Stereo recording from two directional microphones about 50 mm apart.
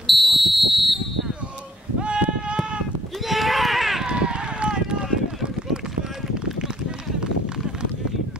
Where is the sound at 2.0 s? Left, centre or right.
Right.